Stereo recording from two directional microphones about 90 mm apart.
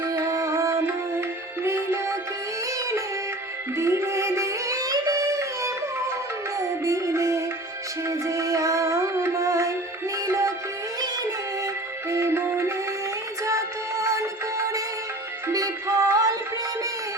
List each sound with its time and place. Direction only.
0.0 s music: 35° right (ahead or behind)
3.8 s music: 30° right (ahead or behind)
12.1 s music: 30° right (ahead or behind)